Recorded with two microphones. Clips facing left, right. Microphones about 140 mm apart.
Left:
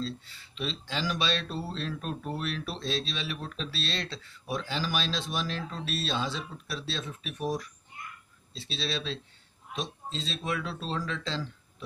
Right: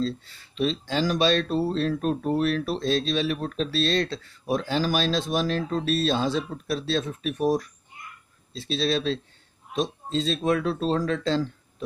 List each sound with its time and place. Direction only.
0.0 s speech: 45° right (ahead or behind)